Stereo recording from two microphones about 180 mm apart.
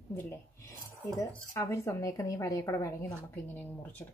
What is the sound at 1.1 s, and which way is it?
Speech, 15° left (ahead or behind).